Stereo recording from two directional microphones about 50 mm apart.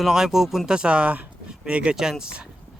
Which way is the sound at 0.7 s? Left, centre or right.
Centre.